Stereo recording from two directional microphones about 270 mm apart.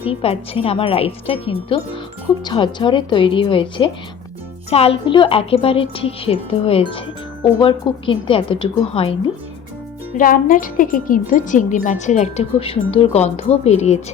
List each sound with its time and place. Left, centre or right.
0.1 s speech: left
10.2 s speech: left